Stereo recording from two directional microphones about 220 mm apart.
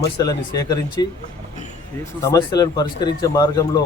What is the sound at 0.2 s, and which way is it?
Speech, 15° left (ahead or behind).